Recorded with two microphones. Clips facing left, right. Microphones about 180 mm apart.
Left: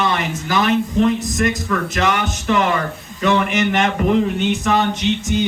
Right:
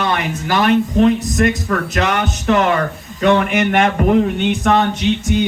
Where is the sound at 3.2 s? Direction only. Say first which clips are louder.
Right 3 dB; 50° right (ahead or behind).